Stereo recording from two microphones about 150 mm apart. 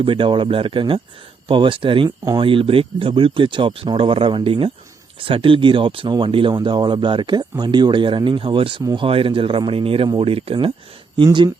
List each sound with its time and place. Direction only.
0.0 s speech: 35° right (ahead or behind)